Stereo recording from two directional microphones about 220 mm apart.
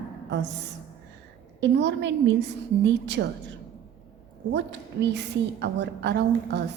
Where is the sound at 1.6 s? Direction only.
55° right (ahead or behind).